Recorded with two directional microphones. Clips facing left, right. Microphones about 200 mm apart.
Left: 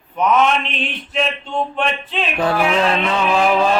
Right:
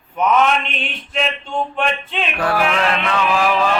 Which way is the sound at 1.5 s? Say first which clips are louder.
Even; centre (ahead or behind).